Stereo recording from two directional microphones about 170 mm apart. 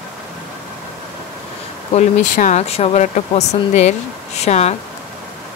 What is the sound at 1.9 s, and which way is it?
Speech, 45° left (ahead or behind).